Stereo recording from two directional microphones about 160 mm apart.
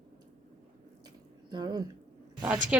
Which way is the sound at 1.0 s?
25° right (ahead or behind).